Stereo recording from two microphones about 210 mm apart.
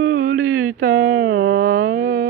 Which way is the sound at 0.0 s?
75° right (ahead or behind).